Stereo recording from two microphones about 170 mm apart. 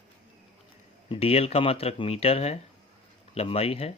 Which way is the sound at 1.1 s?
35° left (ahead or behind).